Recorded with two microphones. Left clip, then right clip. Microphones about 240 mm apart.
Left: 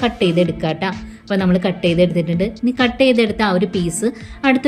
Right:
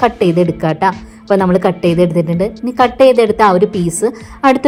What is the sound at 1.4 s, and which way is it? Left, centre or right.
Speech, right.